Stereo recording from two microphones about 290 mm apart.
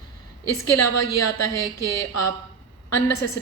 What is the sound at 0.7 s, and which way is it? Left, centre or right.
A woman's voice, left.